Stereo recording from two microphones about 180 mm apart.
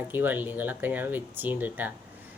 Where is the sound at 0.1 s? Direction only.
10° right (ahead or behind).